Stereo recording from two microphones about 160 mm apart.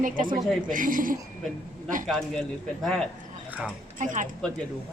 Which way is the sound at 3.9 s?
55° right (ahead or behind).